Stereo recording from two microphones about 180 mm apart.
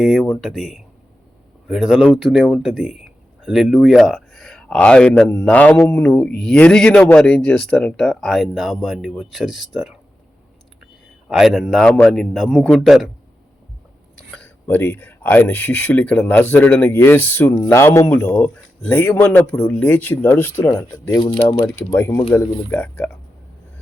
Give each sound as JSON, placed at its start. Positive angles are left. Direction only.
{"t": 0.0, "sound": "a man's voice", "side_deg": 0}
{"t": 11.3, "sound": "speech", "side_deg": 0}
{"t": 14.3, "sound": "speech", "side_deg": 10}